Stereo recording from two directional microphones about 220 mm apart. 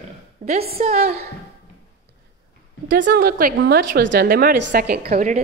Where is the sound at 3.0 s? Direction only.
45° right (ahead or behind).